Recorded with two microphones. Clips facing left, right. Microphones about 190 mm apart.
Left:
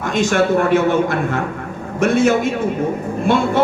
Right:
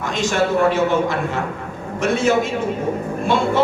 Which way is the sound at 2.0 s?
50° left (ahead or behind).